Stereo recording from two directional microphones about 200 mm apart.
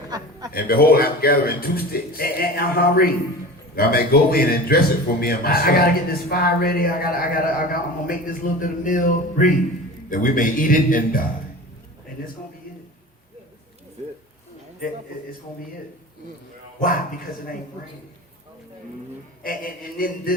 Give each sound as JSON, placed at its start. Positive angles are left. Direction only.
{"t": 0.1, "sound": "a sound", "side_deg": -20}
{"t": 0.5, "sound": "a man's voice", "side_deg": 50}
{"t": 19.4, "sound": "a man's voice", "side_deg": 45}